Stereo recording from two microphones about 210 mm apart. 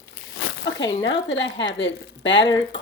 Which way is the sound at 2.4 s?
15° left (ahead or behind).